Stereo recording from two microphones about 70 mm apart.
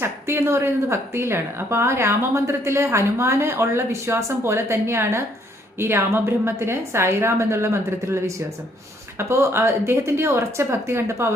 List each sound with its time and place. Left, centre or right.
0.0 s a woman's voice: right